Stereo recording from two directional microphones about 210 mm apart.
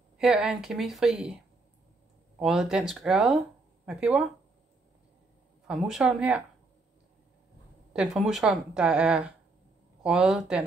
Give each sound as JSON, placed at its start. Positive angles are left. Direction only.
{"t": 0.2, "sound": "a woman's voice", "side_deg": 0}
{"t": 2.3, "sound": "a woman's voice", "side_deg": 0}
{"t": 5.7, "sound": "a woman's voice", "side_deg": 0}
{"t": 7.9, "sound": "a woman's voice", "side_deg": 0}